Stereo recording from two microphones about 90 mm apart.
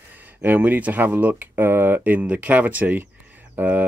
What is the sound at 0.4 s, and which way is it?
Speech, 20° right (ahead or behind).